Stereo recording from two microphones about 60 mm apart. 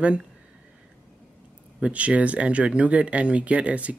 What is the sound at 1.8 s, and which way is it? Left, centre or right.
Speech, right.